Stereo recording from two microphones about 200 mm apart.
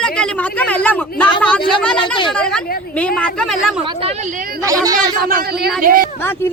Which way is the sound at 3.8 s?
25° right (ahead or behind).